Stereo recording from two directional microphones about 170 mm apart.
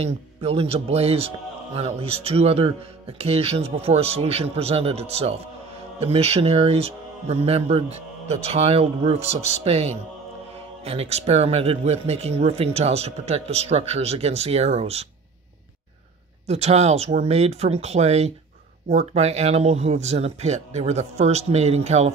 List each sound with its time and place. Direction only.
0.0 s speech: 35° right (ahead or behind)
16.4 s speech: 40° right (ahead or behind)